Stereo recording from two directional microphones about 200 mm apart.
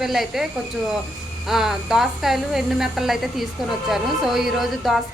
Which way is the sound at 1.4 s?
Centre (ahead or behind).